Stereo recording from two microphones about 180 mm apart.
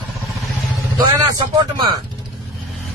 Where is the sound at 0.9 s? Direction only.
20° right (ahead or behind).